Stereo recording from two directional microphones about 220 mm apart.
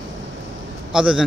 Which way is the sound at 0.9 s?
5° right (ahead or behind).